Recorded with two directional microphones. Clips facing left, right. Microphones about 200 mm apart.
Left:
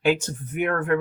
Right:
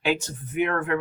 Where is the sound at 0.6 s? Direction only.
45° left (ahead or behind).